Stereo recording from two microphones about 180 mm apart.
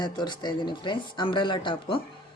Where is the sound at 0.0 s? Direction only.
25° left (ahead or behind).